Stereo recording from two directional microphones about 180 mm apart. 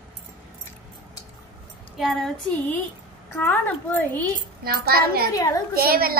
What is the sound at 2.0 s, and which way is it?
A woman's voice, centre (ahead or behind).